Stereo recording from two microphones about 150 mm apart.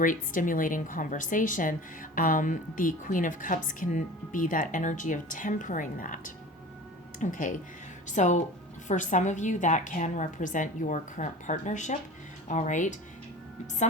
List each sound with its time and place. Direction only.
0.0 s a woman's voice: 60° left (ahead or behind)